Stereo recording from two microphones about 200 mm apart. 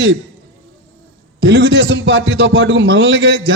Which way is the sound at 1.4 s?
60° right (ahead or behind).